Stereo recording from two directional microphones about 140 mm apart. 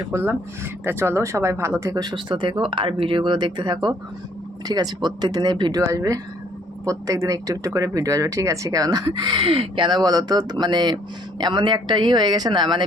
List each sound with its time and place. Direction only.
0.1 s speech: 15° right (ahead or behind); by 12.8 s 35° right (ahead or behind)